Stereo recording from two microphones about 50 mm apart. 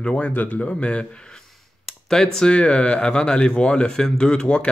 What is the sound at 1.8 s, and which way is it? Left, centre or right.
Speech, centre.